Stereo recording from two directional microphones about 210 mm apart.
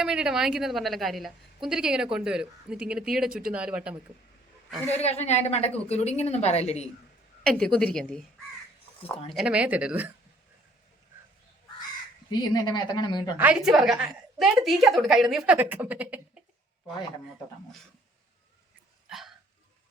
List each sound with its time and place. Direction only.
0.0 s a woman's voice: 5° right (ahead or behind)
4.9 s a woman's voice: 30° left (ahead or behind)
7.4 s a woman's voice: 5° left (ahead or behind)
9.3 s a woman's voice: 5° right (ahead or behind)
12.4 s a woman's voice: 20° left (ahead or behind)
13.3 s a woman's voice: 5° right (ahead or behind)
19.0 s hiccup: centre (ahead or behind)